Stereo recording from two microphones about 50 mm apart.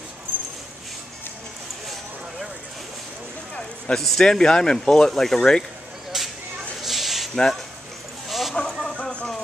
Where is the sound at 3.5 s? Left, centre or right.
Centre.